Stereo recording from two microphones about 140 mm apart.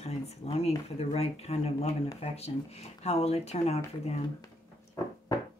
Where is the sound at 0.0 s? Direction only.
50° left (ahead or behind).